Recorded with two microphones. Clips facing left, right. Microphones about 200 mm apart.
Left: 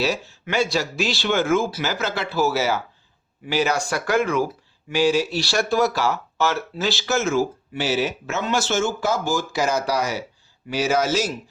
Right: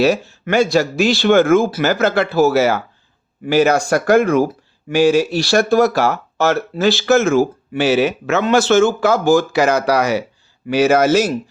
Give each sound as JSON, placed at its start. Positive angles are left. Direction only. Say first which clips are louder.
{"t": 0.0, "sound": "speech", "louder": "right 9 dB", "side_deg": -50}